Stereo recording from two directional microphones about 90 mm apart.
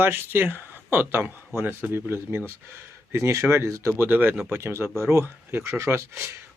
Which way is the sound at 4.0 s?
20° right (ahead or behind).